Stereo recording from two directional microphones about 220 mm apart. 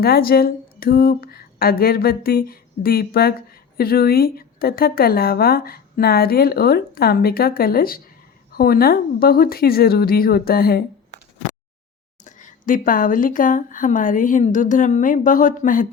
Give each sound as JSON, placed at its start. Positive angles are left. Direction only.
{"t": 0.0, "sound": "speech", "side_deg": 45}
{"t": 12.2, "sound": "speech", "side_deg": 35}